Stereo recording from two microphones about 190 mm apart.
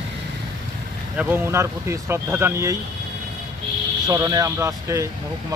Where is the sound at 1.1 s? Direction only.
10° right (ahead or behind).